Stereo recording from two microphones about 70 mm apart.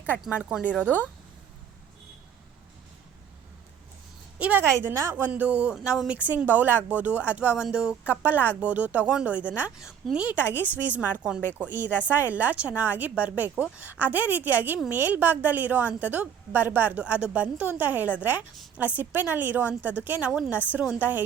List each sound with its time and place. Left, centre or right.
0.1 s a woman's voice: centre
0.7 s speech: centre
4.4 s a woman's voice: centre
5.7 s a woman's voice: centre
6.1 s a woman's voice: right
9.7 s a woman's voice: centre
10.4 s a woman's voice: right